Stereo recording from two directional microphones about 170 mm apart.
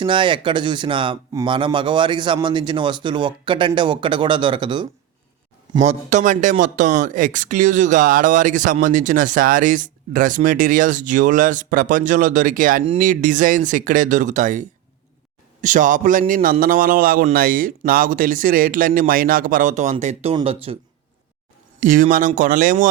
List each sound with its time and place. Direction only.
0.0 s a man's voice: 30° right (ahead or behind)
5.8 s speech: 40° right (ahead or behind)
21.8 s speech: 50° right (ahead or behind)